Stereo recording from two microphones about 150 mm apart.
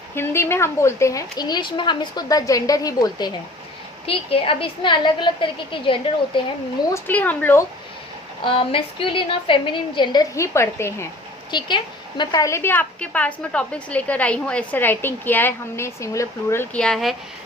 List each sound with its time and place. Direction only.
0.1 s speech: 15° left (ahead or behind)
4.0 s a woman's voice: 40° left (ahead or behind)
6.9 s a woman's voice: 10° left (ahead or behind)
8.4 s a woman's voice: 35° left (ahead or behind); by 11.1 s 15° left (ahead or behind)
11.5 s a woman's voice: 30° left (ahead or behind)
16.7 s speech: 5° left (ahead or behind)